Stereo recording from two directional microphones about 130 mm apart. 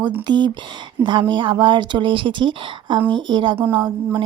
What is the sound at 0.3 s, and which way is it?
Speech, 35° right (ahead or behind).